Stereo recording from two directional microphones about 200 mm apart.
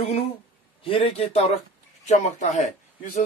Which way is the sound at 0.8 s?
30° left (ahead or behind).